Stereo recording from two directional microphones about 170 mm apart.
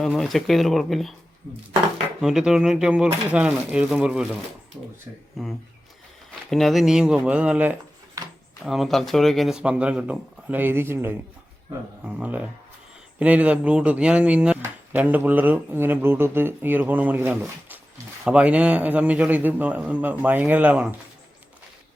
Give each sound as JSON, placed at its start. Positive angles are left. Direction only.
{"t": 0.0, "sound": "speech", "side_deg": 0}
{"t": 2.2, "sound": "speech", "side_deg": -5}
{"t": 6.5, "sound": "speech", "side_deg": 0}